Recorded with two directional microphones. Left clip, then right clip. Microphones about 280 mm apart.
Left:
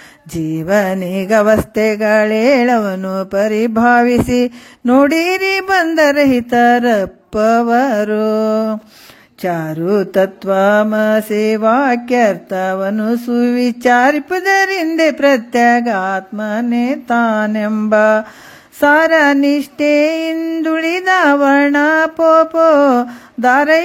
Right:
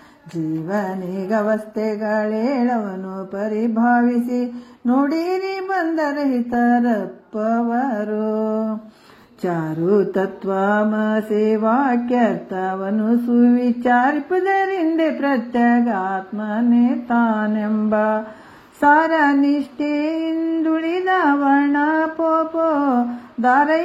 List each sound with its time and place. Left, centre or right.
1.3 s mantra: left